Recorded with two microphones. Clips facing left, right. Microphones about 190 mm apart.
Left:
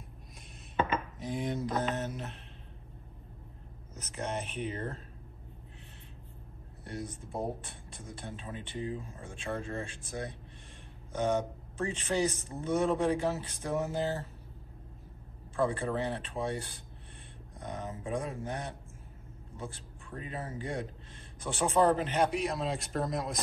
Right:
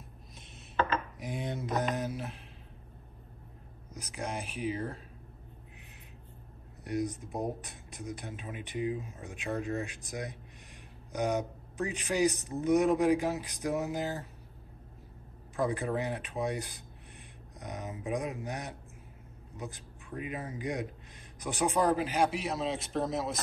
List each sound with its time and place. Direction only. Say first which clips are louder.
1.7 s mantra: right 1 dB; 15° right (ahead or behind)
4.1 s speech: left 1 dB; 10° right (ahead or behind)
6.8 s speech: right 7 dB; 15° right (ahead or behind)
15.5 s speech: even; 15° right (ahead or behind)